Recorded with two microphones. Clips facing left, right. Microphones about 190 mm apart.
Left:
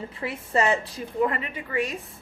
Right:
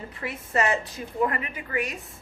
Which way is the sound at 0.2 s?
30° left (ahead or behind).